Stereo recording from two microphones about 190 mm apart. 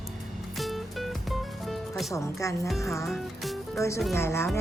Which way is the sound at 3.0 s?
Centre (ahead or behind).